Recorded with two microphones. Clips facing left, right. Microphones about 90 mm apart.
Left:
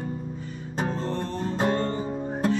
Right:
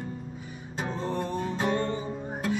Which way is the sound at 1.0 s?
15° right (ahead or behind).